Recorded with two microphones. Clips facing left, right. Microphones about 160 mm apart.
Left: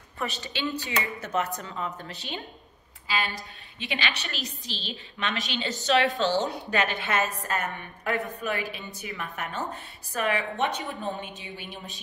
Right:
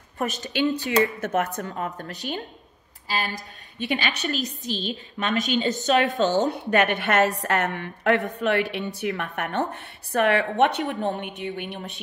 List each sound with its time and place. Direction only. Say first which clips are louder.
0.2 s a woman's voice: right 7 dB; 45° right (ahead or behind); by 12.0 s 65° right (ahead or behind)